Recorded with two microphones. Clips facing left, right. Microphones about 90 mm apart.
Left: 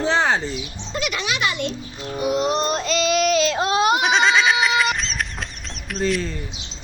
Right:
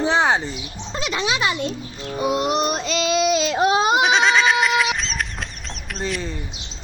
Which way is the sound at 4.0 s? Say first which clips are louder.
Right 1 dB; centre (ahead or behind).